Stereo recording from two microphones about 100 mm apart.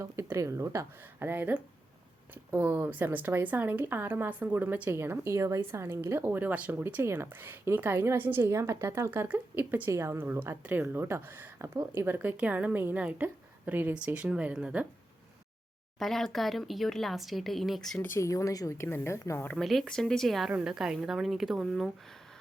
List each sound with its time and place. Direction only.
0.0 s speech: 30° right (ahead or behind)
1.2 s speech: 20° right (ahead or behind)
16.0 s speech: 5° left (ahead or behind)
18.0 s speech: 25° left (ahead or behind)
19.5 s speech: centre (ahead or behind)